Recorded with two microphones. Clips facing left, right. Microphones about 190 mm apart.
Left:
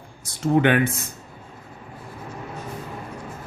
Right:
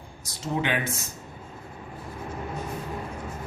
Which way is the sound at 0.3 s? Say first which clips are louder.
Left 9 dB; 55° left (ahead or behind).